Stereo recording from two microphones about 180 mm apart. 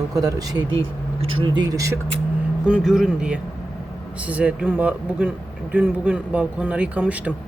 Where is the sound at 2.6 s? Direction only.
5° right (ahead or behind).